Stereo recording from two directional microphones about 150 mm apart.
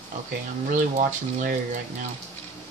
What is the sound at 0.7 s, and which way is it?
Speech, 60° right (ahead or behind).